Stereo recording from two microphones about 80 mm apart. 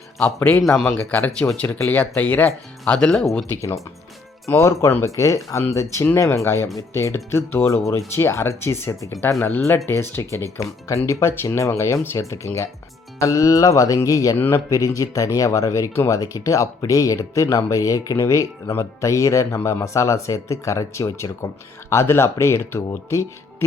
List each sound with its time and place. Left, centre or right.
0.9 s speech: centre
4.4 s speech: left
14.3 s speech: left
14.7 s speech: left